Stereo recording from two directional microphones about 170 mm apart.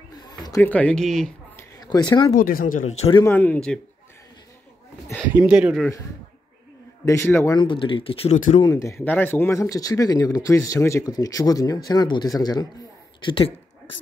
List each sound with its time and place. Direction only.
0.3 s a sound: 25° left (ahead or behind)
0.6 s speech: 10° left (ahead or behind)
1.6 s a sound: 20° left (ahead or behind)
2.3 s speech: 55° left (ahead or behind)
2.9 s speech: 40° left (ahead or behind)
3.3 s a man's voice: 10° left (ahead or behind)
5.4 s speech: 5° right (ahead or behind)
7.1 s a man's voice: 15° left (ahead or behind)
7.5 s speech: 30° left (ahead or behind)
8.4 s speech: 45° left (ahead or behind)
8.6 s speech: 20° left (ahead or behind)